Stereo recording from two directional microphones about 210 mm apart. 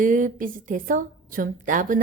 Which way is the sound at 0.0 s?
40° right (ahead or behind).